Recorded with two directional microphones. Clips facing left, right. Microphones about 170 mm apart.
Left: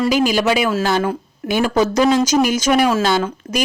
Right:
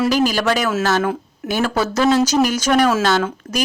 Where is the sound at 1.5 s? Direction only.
15° left (ahead or behind).